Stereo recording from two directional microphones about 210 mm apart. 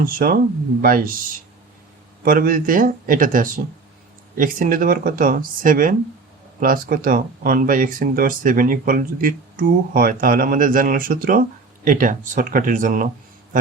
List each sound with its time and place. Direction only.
0.0 s speech: 45° right (ahead or behind)
2.2 s speech: 40° right (ahead or behind)